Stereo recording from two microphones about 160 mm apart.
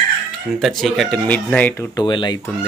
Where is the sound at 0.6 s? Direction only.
Centre (ahead or behind).